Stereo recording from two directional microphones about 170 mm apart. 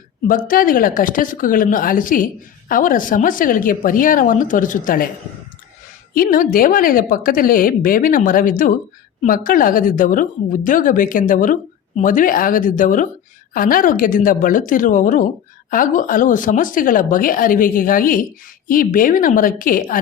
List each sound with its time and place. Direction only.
0.3 s a woman's voice: 55° left (ahead or behind)
6.1 s a woman's voice: 55° left (ahead or behind)